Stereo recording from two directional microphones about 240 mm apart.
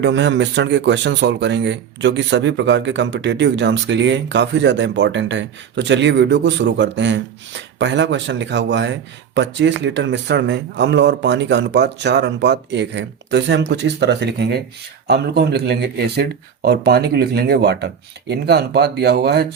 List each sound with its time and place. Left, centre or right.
0.0 s speech: right